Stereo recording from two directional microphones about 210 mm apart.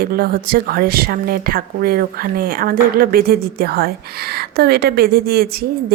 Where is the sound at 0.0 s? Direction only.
45° right (ahead or behind).